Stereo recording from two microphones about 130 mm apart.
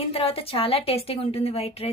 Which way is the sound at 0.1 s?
45° left (ahead or behind).